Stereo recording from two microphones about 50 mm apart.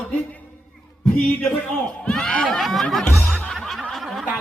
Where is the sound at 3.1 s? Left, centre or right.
Centre.